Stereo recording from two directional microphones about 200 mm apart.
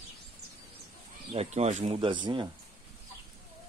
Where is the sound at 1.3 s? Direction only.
30° right (ahead or behind).